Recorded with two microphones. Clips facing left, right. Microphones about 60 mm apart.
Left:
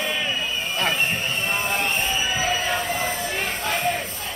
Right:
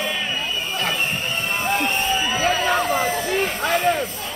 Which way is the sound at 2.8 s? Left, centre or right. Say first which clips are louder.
Right 5 dB; right.